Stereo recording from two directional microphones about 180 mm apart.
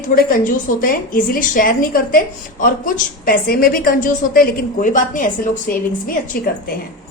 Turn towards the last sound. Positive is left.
turn(degrees=50)  # may be behind; listen again after turning